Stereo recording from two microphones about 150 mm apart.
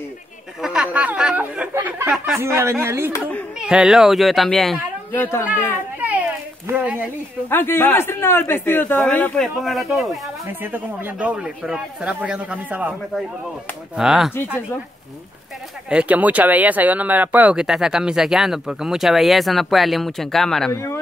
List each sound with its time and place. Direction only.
0.6 s speech: 5° right (ahead or behind)
3.1 s a man's voice: 10° left (ahead or behind)
3.5 s speech: 5° right (ahead or behind)
5.1 s a man's voice: 10° left (ahead or behind)
5.9 s a sound: 10° right (ahead or behind)
6.7 s speech: 10° right (ahead or behind)
7.4 s a man's voice: 15° left (ahead or behind)
10.4 s speech: 15° right (ahead or behind)
13.9 s speech: 5° right (ahead or behind)
15.9 s speech: 10° right (ahead or behind)
20.7 s a man's voice: 15° left (ahead or behind)